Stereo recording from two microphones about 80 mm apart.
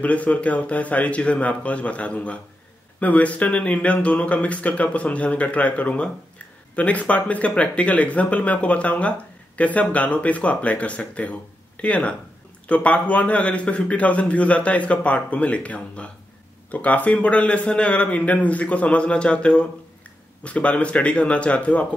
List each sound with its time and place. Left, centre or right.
0.0 s speech: centre